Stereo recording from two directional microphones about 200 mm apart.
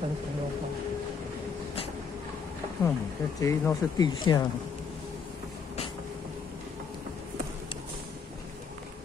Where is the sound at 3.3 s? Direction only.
15° left (ahead or behind).